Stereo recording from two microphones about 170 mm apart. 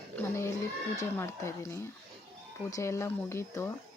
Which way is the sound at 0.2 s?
15° left (ahead or behind).